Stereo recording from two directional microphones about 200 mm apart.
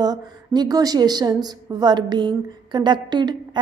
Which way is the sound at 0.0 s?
20° right (ahead or behind).